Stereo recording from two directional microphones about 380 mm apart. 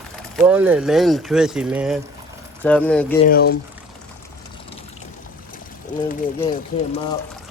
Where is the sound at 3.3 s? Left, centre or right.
Left.